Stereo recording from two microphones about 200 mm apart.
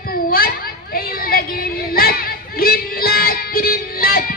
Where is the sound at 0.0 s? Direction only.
45° left (ahead or behind).